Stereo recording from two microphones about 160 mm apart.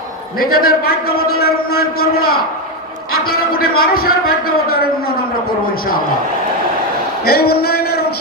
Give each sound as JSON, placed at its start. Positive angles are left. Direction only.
{"t": 0.3, "sound": "a man's voice", "side_deg": 70}
{"t": 7.3, "sound": "speech", "side_deg": 75}